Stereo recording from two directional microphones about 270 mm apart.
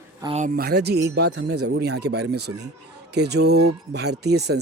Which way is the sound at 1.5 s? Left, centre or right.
Right.